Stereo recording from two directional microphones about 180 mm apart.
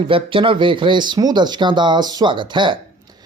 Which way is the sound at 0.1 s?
30° right (ahead or behind).